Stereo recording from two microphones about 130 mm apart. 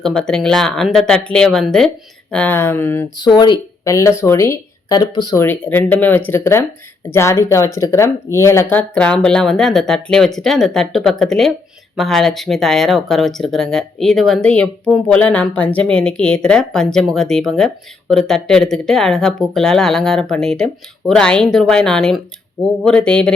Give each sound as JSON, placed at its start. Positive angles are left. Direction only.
{"t": 0.0, "sound": "speech", "side_deg": 5}
{"t": 3.2, "sound": "speech", "side_deg": 35}
{"t": 3.9, "sound": "speech", "side_deg": 20}
{"t": 5.4, "sound": "speech", "side_deg": 15}
{"t": 9.0, "sound": "speech", "side_deg": 5}